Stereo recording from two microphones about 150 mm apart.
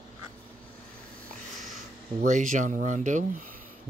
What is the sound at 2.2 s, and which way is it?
Speech, 55° right (ahead or behind).